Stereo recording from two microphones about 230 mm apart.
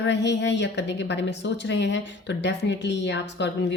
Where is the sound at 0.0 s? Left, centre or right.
Left.